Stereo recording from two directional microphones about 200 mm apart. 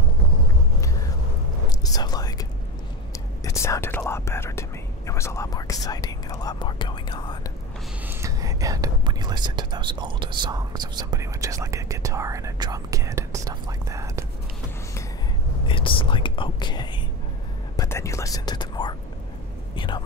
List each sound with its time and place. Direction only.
1.7 s whispering: 20° left (ahead or behind)
3.4 s speech: 15° left (ahead or behind)
8.1 s speech: 15° right (ahead or behind)
15.6 s speech: 25° left (ahead or behind)